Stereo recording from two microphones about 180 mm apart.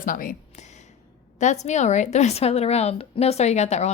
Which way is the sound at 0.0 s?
50° left (ahead or behind).